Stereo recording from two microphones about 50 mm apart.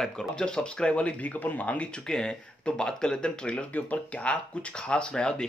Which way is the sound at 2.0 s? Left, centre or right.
Centre.